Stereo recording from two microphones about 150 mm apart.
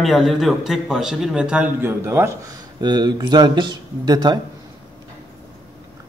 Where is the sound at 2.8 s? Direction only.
30° right (ahead or behind).